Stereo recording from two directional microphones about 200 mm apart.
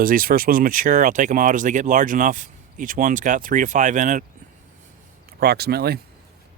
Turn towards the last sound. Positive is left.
turn(degrees=-50)  # may be behind; listen again after turning